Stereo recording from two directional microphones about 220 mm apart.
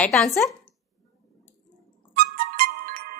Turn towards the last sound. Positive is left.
turn(degrees=-40)  # may be behind; listen again after turning